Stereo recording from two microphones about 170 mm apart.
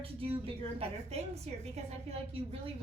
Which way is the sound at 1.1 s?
40° right (ahead or behind).